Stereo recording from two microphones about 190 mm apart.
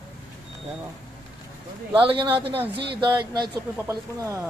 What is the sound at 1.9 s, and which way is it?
Speech, 25° right (ahead or behind).